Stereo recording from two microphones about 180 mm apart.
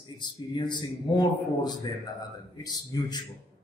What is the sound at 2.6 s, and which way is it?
Speech, 20° left (ahead or behind).